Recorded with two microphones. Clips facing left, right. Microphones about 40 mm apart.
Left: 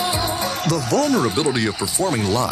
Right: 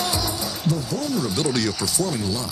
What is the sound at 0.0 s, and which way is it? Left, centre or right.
Music, left.